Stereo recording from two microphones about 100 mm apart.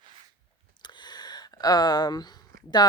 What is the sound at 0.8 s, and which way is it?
Speech, 45° left (ahead or behind).